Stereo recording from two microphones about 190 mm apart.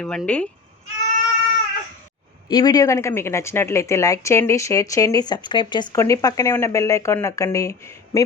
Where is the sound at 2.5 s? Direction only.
20° left (ahead or behind).